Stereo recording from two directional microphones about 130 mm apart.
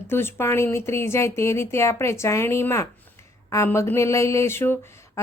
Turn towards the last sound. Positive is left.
turn(degrees=20)  # may be behind; listen again after turning